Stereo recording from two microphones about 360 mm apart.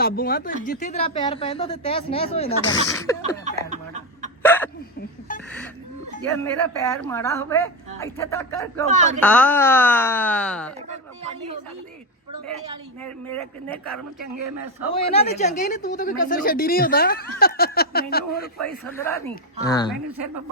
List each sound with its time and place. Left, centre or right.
0.0 s speech: left
3.2 s chuckle: centre
4.4 s hiccup: centre
6.2 s speech: centre
8.9 s a woman's voice: centre
9.2 s speech: centre
13.0 s speech: centre
13.9 s speech: right
14.9 s speech: centre
18.6 s speech: centre